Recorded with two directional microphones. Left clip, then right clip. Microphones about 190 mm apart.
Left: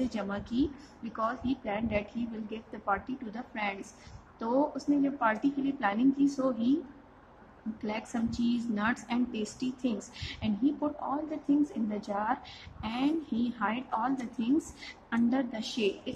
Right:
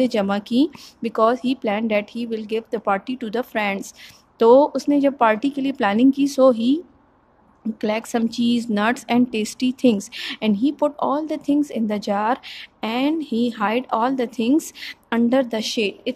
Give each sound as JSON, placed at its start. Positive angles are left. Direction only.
{"t": 0.0, "sound": "a woman's voice", "side_deg": -60}
{"t": 7.8, "sound": "a woman's voice", "side_deg": -60}